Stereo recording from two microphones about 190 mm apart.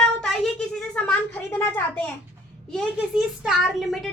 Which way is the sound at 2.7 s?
5° right (ahead or behind).